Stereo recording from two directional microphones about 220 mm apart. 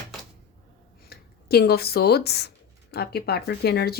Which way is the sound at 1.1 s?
45° left (ahead or behind).